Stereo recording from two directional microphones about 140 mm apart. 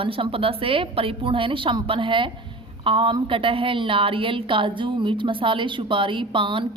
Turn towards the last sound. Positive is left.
turn(degrees=-35)  # may be behind; listen again after turning